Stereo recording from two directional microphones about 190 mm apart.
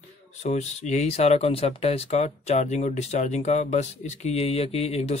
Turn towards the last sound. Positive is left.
turn(degrees=35)  # may be behind; listen again after turning